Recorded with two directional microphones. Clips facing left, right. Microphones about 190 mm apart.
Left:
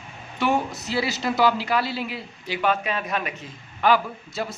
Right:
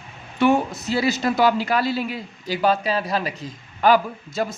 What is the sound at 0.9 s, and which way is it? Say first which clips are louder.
A man's voice: right 3 dB; 50° right (ahead or behind).